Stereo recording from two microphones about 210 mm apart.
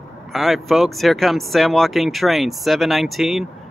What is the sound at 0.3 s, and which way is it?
Speech, centre (ahead or behind).